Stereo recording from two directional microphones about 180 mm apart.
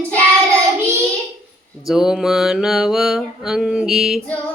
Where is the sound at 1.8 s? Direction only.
5° right (ahead or behind).